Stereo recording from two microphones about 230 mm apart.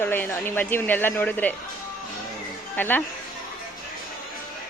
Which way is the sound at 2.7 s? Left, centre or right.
Centre.